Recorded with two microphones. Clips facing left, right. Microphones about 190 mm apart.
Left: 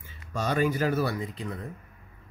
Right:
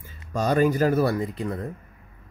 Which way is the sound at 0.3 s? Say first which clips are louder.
Right 5 dB; 40° right (ahead or behind).